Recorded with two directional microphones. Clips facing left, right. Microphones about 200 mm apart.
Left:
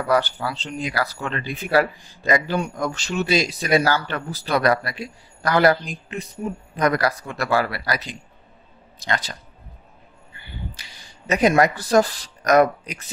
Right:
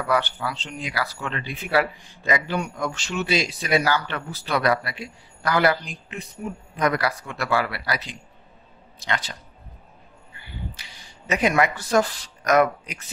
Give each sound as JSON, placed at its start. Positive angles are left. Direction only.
{"t": 0.0, "sound": "speech", "side_deg": 40}
{"t": 10.7, "sound": "speech", "side_deg": 40}